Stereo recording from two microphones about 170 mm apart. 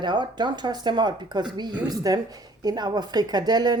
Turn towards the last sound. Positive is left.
turn(degrees=-25)  # may be behind; listen again after turning